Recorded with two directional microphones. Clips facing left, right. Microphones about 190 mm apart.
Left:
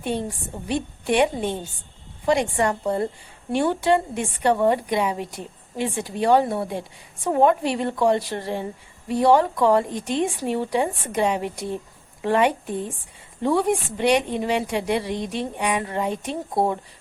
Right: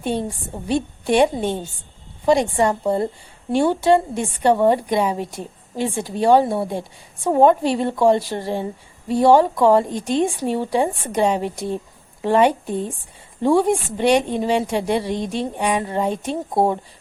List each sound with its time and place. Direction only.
0.7 s a woman's voice: 35° right (ahead or behind)
2.6 s a woman's voice: 25° right (ahead or behind)